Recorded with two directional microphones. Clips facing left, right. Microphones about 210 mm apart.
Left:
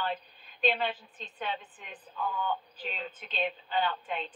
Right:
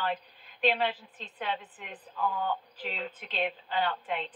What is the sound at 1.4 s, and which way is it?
A woman's voice, 60° right (ahead or behind).